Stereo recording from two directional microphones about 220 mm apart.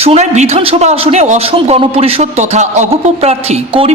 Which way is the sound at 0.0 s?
30° right (ahead or behind).